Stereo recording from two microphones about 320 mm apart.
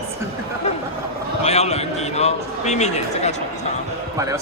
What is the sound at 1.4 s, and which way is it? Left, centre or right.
A man's voice, centre.